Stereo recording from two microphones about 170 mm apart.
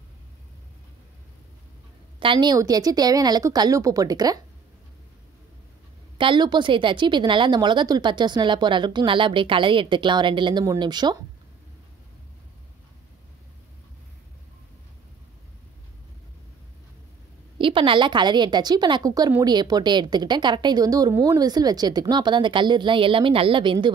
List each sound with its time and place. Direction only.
2.1 s a woman's voice: 30° right (ahead or behind)
6.1 s a woman's voice: 30° right (ahead or behind)
17.6 s a woman's voice: 30° right (ahead or behind)